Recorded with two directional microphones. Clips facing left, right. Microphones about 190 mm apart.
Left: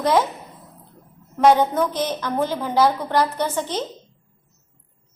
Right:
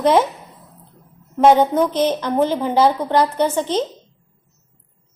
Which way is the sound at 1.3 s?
20° right (ahead or behind).